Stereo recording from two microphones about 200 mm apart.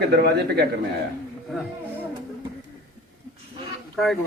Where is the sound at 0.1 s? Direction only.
55° right (ahead or behind).